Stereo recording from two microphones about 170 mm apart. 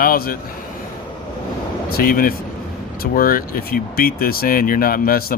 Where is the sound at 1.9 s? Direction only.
60° left (ahead or behind).